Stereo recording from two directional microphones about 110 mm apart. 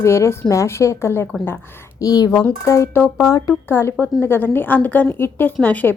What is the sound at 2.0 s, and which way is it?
Speech, 35° left (ahead or behind).